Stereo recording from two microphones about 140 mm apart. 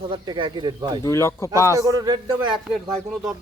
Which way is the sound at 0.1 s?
35° right (ahead or behind).